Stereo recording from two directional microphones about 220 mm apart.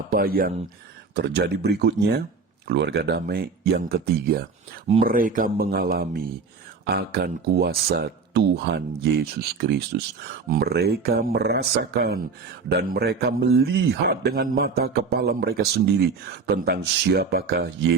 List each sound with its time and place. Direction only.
0.1 s a man's voice: 40° right (ahead or behind)